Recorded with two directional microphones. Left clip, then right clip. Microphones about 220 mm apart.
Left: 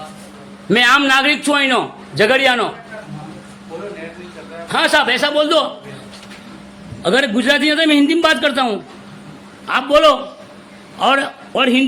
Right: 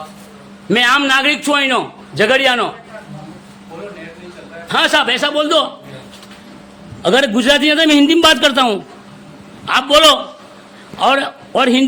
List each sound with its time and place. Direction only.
0.7 s a man's voice: centre (ahead or behind)
4.7 s a man's voice: 10° right (ahead or behind)
7.0 s a man's voice: 15° right (ahead or behind)
9.6 s a man's voice: 5° right (ahead or behind)
11.5 s a man's voice: 20° right (ahead or behind)